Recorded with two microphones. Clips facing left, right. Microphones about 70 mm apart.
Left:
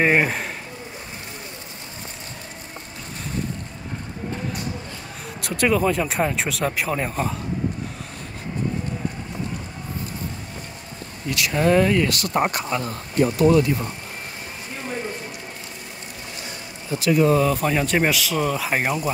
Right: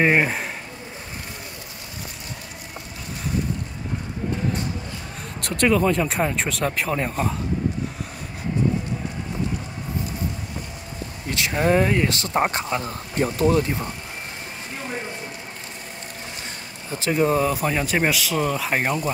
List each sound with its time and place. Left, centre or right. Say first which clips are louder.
0.0 s speech: even; centre
5.4 s speech: right 1 dB; centre
11.2 s speech: left 1 dB; right
16.9 s speech: left 4 dB; right
17.2 s speech: left 1 dB; centre